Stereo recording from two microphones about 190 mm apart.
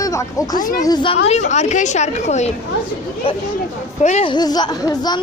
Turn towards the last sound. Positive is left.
turn(degrees=20)  # may be behind; listen again after turning